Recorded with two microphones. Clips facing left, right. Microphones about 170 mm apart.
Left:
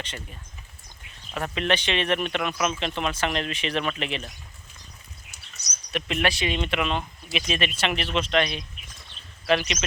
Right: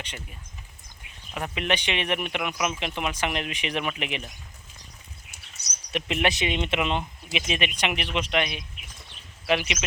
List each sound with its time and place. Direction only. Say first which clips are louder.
0.0 s speech: left 2 dB; 10° right (ahead or behind)
5.9 s speech: even; 20° right (ahead or behind)
9.1 s a sound: left 2 dB; 15° right (ahead or behind)